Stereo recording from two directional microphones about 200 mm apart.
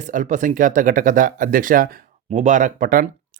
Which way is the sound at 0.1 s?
40° right (ahead or behind).